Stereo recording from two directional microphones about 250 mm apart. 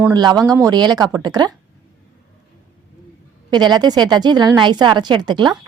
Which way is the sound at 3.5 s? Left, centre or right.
Centre.